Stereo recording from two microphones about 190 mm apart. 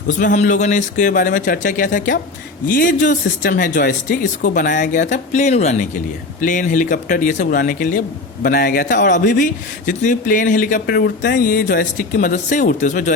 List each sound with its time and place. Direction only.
0.3 s speech: 40° left (ahead or behind)